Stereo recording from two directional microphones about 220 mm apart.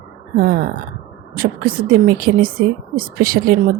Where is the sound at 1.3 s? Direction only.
40° right (ahead or behind).